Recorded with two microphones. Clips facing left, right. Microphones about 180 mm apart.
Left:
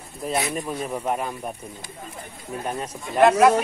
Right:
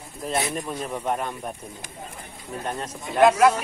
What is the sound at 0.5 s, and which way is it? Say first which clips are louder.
Speech: left 2 dB; 5° left (ahead or behind).